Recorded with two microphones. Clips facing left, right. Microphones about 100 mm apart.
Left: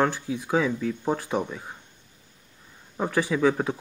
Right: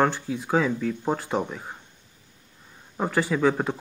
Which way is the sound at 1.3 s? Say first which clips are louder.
Right 1 dB; 30° right (ahead or behind).